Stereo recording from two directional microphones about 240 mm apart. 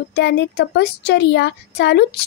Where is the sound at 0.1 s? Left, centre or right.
Left.